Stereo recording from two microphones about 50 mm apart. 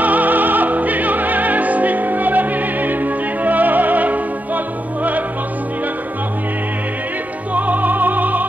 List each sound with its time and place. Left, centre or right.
0.0 s opera: right
3.4 s music: right
7.5 s music: right